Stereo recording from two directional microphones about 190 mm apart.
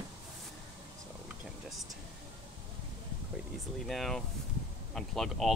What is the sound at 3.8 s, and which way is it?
Speech, centre (ahead or behind).